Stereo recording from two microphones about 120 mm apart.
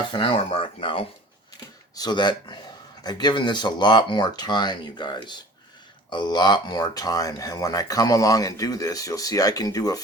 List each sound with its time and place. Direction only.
0.1 s speech: 45° left (ahead or behind)
2.0 s speech: 35° left (ahead or behind)